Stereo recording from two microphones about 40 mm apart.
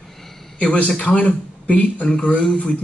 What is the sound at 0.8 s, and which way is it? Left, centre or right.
Speech, left.